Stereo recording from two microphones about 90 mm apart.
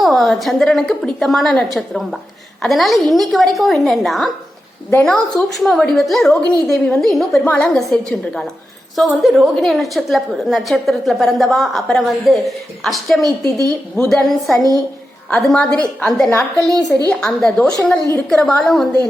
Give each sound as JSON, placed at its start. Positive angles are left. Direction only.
{"t": 0.0, "sound": "a woman's voice", "side_deg": 0}
{"t": 9.2, "sound": "a woman's voice", "side_deg": 0}
{"t": 13.2, "sound": "a woman's voice", "side_deg": -40}
{"t": 13.9, "sound": "a woman's voice", "side_deg": 5}
{"t": 15.3, "sound": "a woman's voice", "side_deg": 15}
{"t": 16.6, "sound": "speech", "side_deg": -45}
{"t": 17.1, "sound": "a woman's voice", "side_deg": 10}